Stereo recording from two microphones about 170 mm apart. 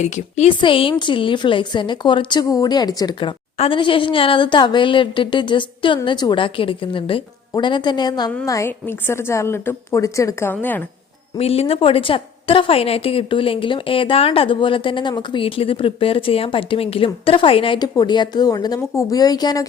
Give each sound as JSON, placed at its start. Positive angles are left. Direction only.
{"t": 0.0, "sound": "a woman's voice", "side_deg": 40}
{"t": 0.6, "sound": "a woman's voice", "side_deg": 30}
{"t": 11.3, "sound": "a woman's voice", "side_deg": 35}